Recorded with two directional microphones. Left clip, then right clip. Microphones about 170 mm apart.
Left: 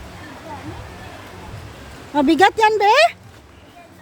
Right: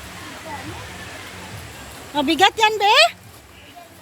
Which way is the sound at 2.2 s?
45° left (ahead or behind).